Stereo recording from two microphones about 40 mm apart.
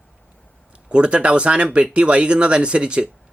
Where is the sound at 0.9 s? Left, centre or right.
Right.